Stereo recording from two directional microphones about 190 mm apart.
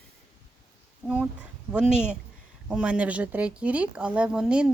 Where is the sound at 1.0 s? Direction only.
5° right (ahead or behind).